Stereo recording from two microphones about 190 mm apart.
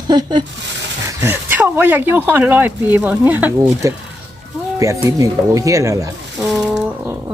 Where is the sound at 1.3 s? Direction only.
10° right (ahead or behind).